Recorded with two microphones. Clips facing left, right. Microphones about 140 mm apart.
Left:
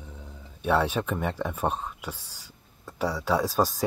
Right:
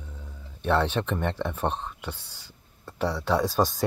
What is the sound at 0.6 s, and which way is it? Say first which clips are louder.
Speech: even; 10° left (ahead or behind).